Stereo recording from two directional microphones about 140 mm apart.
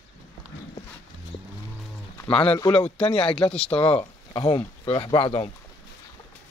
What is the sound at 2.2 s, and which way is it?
Speech, 40° left (ahead or behind).